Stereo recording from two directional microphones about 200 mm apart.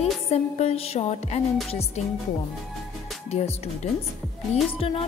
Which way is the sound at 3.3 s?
30° left (ahead or behind).